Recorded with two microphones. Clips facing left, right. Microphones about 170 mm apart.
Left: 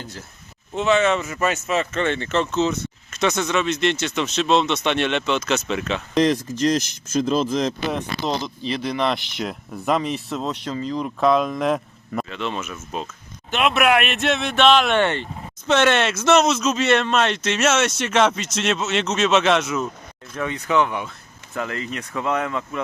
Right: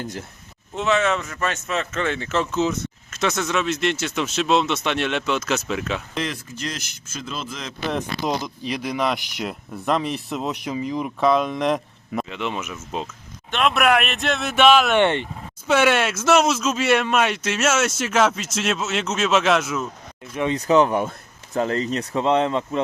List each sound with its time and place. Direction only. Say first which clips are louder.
0.8 s speech: left 2 dB; centre (ahead or behind)
6.1 s speech: left 10 dB; 40° left (ahead or behind)
8.2 s speech: even; 10° right (ahead or behind)
11.2 s speech: left 1 dB; centre (ahead or behind)
12.3 s speech: even; 15° right (ahead or behind)
13.5 s speech: left 1 dB; 5° left (ahead or behind)
20.5 s speech: right 4 dB; 35° right (ahead or behind)
21.6 s speech: right 6 dB; 35° right (ahead or behind)